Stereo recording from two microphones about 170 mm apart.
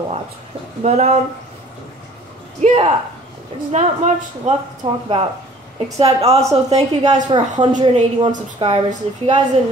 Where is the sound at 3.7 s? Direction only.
45° right (ahead or behind).